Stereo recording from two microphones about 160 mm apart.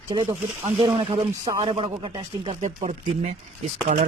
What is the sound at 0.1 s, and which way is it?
Speech, 30° right (ahead or behind).